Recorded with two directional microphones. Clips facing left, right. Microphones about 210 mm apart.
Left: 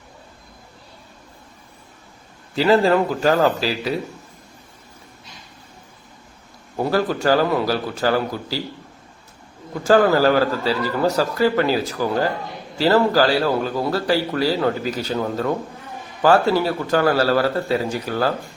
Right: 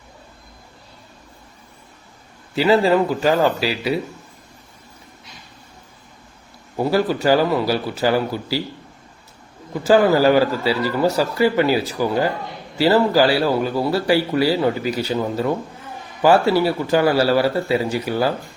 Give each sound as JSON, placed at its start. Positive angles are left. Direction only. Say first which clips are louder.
{"t": 2.6, "sound": "a man's voice", "louder": "even", "side_deg": -5}
{"t": 6.7, "sound": "a man's voice", "louder": "right 2 dB", "side_deg": -5}
{"t": 9.8, "sound": "a man's voice", "louder": "right 1 dB", "side_deg": -10}